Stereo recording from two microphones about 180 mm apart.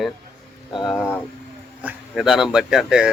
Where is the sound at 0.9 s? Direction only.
10° left (ahead or behind).